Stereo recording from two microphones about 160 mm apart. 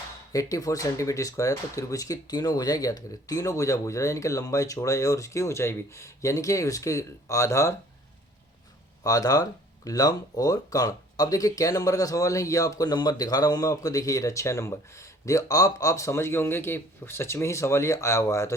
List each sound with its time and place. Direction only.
0.3 s speech: 20° left (ahead or behind)
9.0 s speech: 20° left (ahead or behind)